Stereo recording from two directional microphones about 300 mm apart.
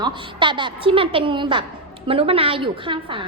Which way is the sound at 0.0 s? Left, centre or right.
Centre.